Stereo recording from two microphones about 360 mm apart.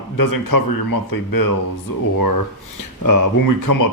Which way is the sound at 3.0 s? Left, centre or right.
Left.